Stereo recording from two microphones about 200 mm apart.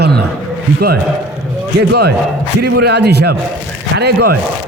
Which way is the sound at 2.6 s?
55° right (ahead or behind).